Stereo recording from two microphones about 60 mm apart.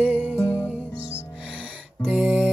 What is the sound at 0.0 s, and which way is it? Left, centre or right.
Music, right.